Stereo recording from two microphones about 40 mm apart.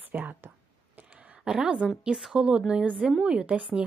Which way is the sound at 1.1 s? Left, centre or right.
Right.